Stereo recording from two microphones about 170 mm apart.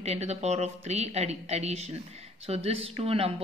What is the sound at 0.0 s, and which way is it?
Speech, 40° right (ahead or behind).